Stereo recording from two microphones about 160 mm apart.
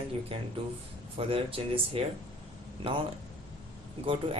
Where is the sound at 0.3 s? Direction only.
35° right (ahead or behind).